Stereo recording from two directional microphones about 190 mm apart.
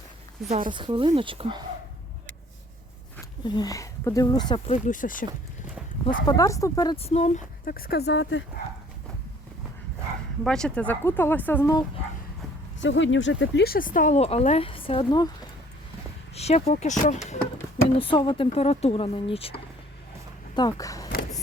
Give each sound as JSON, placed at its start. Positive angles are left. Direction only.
{"t": 0.4, "sound": "speech", "side_deg": -25}
{"t": 3.4, "sound": "speech", "side_deg": 20}
{"t": 4.7, "sound": "speech", "side_deg": 45}
{"t": 6.1, "sound": "speech", "side_deg": 20}
{"t": 6.9, "sound": "a woman's voice", "side_deg": 35}
{"t": 7.6, "sound": "speech", "side_deg": 50}
{"t": 10.4, "sound": "speech", "side_deg": 5}
{"t": 12.8, "sound": "speech", "side_deg": 75}
{"t": 13.7, "sound": "a woman's voice", "side_deg": 45}
{"t": 16.3, "sound": "a woman's voice", "side_deg": 35}
{"t": 20.6, "sound": "speech", "side_deg": 20}